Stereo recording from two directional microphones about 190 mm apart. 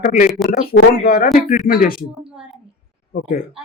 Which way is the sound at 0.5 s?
50° left (ahead or behind).